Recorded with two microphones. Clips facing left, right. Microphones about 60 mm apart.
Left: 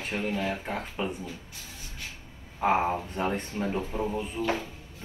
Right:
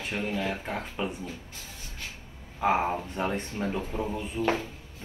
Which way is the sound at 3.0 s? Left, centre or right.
Left.